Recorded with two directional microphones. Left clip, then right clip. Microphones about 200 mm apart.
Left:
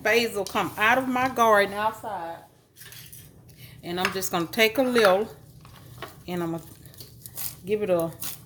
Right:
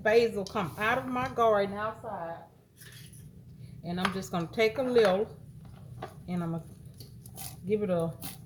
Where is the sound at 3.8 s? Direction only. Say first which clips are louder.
Left 7 dB; 40° left (ahead or behind).